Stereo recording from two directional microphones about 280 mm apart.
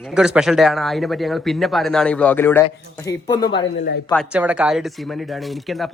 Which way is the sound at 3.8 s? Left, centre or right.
Left.